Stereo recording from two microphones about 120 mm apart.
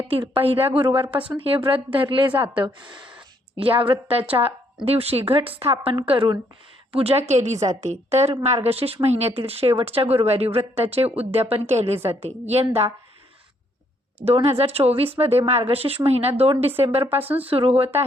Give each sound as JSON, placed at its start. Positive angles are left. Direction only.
{"t": 0.1, "sound": "a woman's voice", "side_deg": -50}
{"t": 6.9, "sound": "a woman's voice", "side_deg": -60}
{"t": 14.3, "sound": "a woman's voice", "side_deg": -55}